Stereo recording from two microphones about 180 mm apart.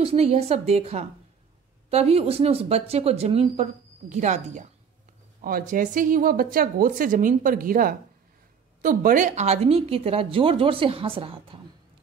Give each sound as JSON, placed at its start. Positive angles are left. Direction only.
{"t": 0.0, "sound": "speech", "side_deg": -35}